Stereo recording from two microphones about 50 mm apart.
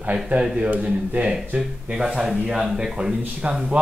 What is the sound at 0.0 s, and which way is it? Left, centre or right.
Speech, right.